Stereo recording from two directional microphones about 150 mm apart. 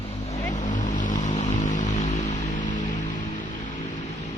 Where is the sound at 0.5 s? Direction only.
55° left (ahead or behind).